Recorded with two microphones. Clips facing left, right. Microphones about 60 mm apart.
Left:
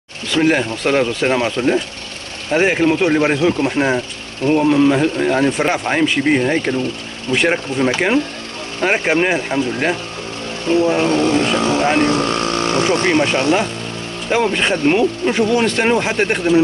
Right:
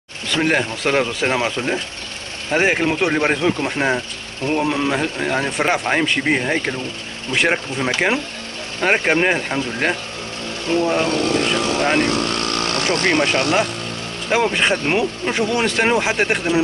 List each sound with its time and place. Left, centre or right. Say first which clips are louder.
0.3 s speech: left 3 dB; centre
11.1 s speech: left 4 dB; left; by 13.4 s centre
14.3 s speech: left 1 dB; centre